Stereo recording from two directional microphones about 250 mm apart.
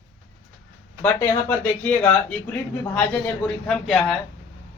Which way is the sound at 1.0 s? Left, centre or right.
Centre.